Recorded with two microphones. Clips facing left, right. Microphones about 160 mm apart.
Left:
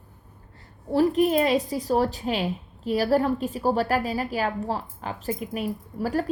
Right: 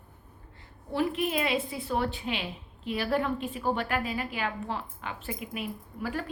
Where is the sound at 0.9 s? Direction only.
40° left (ahead or behind).